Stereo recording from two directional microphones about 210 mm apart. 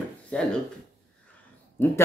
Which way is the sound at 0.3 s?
5° left (ahead or behind).